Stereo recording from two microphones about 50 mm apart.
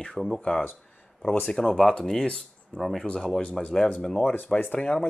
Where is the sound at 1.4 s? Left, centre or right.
Centre.